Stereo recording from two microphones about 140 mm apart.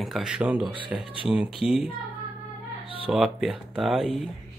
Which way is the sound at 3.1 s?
5° right (ahead or behind).